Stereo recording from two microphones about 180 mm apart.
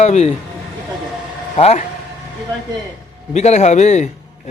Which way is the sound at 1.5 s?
35° left (ahead or behind).